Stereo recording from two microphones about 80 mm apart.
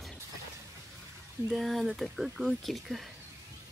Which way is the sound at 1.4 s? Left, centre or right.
Centre.